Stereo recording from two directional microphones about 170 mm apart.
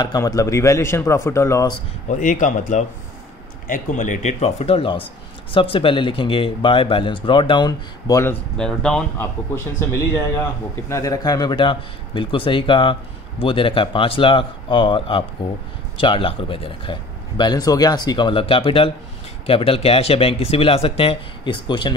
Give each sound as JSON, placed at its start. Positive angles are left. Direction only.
{"t": 0.0, "sound": "speech", "side_deg": 20}
{"t": 2.0, "sound": "speech", "side_deg": 50}
{"t": 8.5, "sound": "speech", "side_deg": 5}
{"t": 9.8, "sound": "a man's voice", "side_deg": 15}